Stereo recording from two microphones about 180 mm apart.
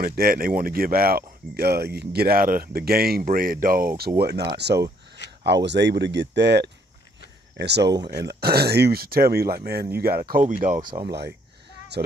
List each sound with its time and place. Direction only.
0.0 s speech: 55° right (ahead or behind); by 7.8 s 70° right (ahead or behind)
7.8 s speech: 20° right (ahead or behind)
8.1 s speech: 60° right (ahead or behind)
10.8 s speech: 25° right (ahead or behind)
11.1 s speech: 65° right (ahead or behind)